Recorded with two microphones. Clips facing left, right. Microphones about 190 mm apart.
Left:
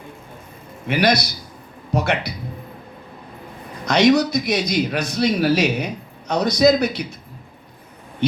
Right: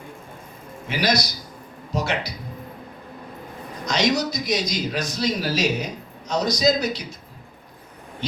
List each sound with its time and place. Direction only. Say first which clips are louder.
0.9 s a man's voice: left 5 dB; 60° left (ahead or behind)
3.8 s a man's voice: left 7 dB; 60° left (ahead or behind)